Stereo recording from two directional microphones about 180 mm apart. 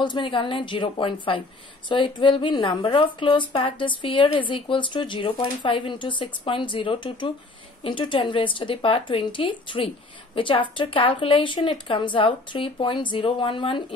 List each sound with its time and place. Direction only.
0.0 s speech: 25° left (ahead or behind)